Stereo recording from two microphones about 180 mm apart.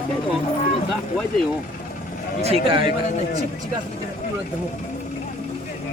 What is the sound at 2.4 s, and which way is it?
Speech, 30° right (ahead or behind).